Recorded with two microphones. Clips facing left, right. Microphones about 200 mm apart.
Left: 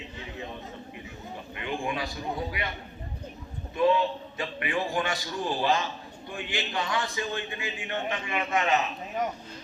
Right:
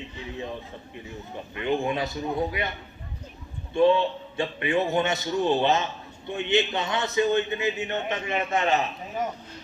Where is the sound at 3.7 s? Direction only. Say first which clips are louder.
Right 4 dB; 30° right (ahead or behind).